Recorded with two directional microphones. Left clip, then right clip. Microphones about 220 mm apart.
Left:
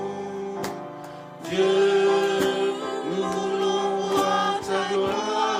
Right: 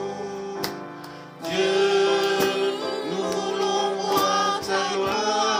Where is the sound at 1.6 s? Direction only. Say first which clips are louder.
Left 1 dB; 25° right (ahead or behind).